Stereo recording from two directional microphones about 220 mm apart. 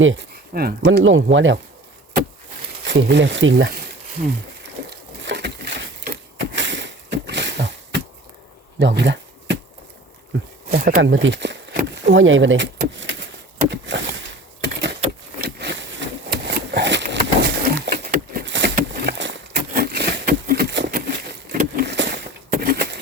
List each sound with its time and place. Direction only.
0.0 s speech: 60° right (ahead or behind)
0.5 s speech: 45° right (ahead or behind)
0.9 s speech: 60° right (ahead or behind)
2.8 s speech: 50° right (ahead or behind)
4.9 s a sound: 50° right (ahead or behind)
8.8 s bee: 50° right (ahead or behind)
10.7 s speech: 40° right (ahead or behind)
11.0 s speech: 60° right (ahead or behind)
13.7 s a sound: 55° right (ahead or behind)